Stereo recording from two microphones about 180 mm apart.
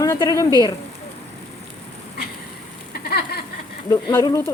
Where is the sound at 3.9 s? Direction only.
20° left (ahead or behind).